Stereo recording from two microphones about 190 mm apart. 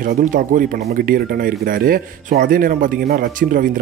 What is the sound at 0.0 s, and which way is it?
Speech, 45° right (ahead or behind).